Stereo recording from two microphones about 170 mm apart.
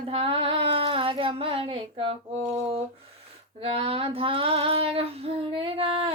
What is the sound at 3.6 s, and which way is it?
Child singing, 35° right (ahead or behind).